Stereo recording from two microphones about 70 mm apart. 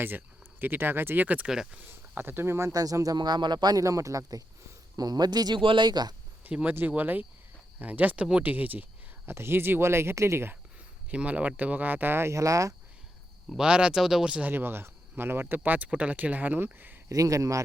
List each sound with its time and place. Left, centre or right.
0.6 s speech: right
1.5 s speech: centre
1.8 s speech: right
2.7 s speech: right
3.2 s speech: right
3.8 s speech: right
4.9 s speech: right
6.4 s speech: centre
9.3 s speech: right
11.1 s speech: centre; by 12.7 s right
13.6 s speech: centre
14.5 s speech: right
17.1 s speech: right